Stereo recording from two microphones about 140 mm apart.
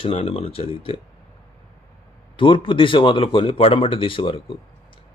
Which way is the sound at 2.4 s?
35° left (ahead or behind).